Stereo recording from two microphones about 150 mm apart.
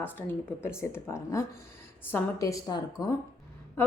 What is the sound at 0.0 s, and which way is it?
A woman's voice, 15° left (ahead or behind).